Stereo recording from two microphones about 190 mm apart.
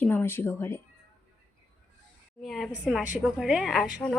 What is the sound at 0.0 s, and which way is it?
Speech, 10° left (ahead or behind).